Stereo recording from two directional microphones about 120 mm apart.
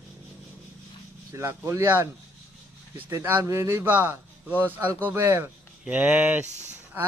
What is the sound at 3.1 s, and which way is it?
A man's voice, 15° right (ahead or behind).